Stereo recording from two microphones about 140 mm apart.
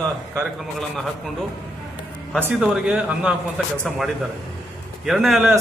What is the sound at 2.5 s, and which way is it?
A man's voice, 5° right (ahead or behind).